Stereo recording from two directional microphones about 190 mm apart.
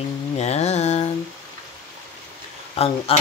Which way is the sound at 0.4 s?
35° left (ahead or behind).